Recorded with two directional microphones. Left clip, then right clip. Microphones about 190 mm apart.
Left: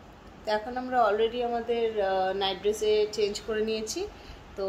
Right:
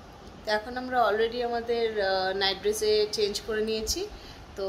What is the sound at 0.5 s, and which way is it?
Speech, 15° left (ahead or behind).